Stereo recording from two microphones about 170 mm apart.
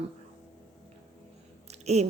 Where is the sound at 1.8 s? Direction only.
40° right (ahead or behind).